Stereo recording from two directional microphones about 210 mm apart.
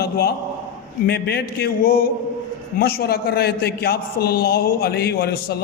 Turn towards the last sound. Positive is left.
turn(degrees=45)  # may be behind; listen again after turning